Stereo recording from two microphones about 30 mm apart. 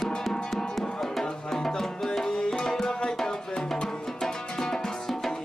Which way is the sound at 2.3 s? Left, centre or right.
Left.